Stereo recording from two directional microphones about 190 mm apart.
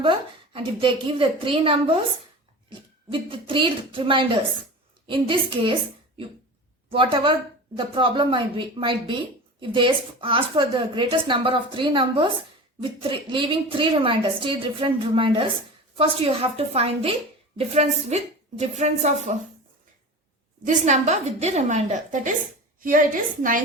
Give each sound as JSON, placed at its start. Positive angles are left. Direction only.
{"t": 0.5, "sound": "speech", "side_deg": -30}
{"t": 6.9, "sound": "a woman's voice", "side_deg": -25}
{"t": 20.7, "sound": "a woman's voice", "side_deg": -40}